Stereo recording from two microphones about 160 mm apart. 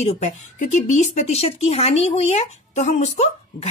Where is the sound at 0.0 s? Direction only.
45° left (ahead or behind).